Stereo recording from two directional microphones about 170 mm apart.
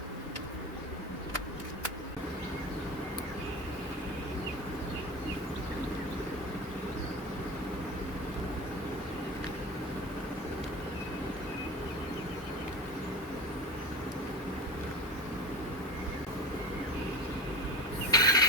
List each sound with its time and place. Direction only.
18.1 s pulleys: 20° left (ahead or behind)